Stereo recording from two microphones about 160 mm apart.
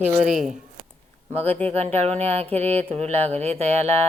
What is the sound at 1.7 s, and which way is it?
Speech, 40° right (ahead or behind).